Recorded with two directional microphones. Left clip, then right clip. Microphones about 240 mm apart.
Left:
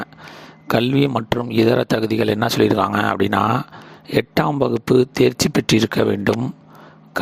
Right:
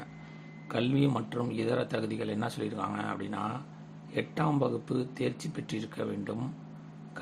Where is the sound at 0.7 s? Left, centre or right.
Left.